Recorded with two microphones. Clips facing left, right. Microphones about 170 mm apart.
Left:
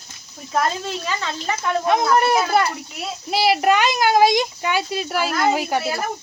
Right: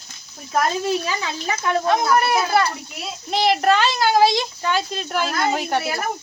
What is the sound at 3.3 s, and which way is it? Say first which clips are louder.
A woman's voice: even; 5° left (ahead or behind).